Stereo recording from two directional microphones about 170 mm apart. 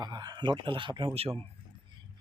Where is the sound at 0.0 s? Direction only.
25° right (ahead or behind).